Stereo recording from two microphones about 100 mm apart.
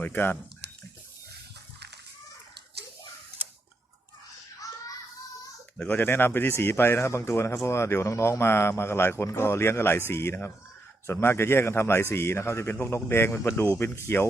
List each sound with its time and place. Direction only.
0.0 s speech: 20° left (ahead or behind)
5.7 s speech: 15° left (ahead or behind)